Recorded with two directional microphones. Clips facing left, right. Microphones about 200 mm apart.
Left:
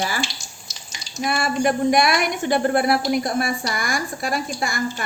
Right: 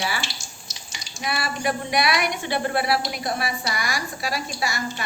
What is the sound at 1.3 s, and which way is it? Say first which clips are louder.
A woman's voice: left 5 dB; 45° left (ahead or behind).